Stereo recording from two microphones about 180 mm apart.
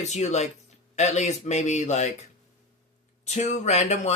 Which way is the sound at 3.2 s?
40° left (ahead or behind).